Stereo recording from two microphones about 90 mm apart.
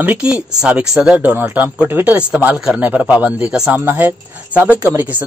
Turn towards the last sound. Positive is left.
turn(degrees=-20)  # may be behind; listen again after turning